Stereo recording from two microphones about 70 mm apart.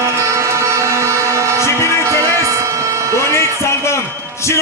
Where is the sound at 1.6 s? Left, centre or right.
Left.